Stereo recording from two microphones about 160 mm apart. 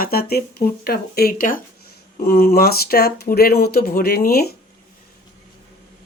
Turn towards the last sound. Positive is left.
turn(degrees=75)  # may be behind; listen again after turning